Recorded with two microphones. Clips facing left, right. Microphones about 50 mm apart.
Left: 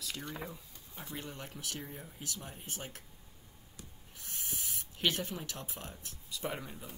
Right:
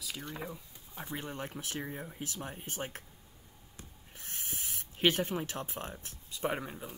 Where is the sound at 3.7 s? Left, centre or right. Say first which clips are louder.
Right 1 dB; right.